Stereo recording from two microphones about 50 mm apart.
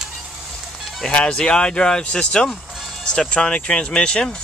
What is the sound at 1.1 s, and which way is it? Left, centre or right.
Speech, left.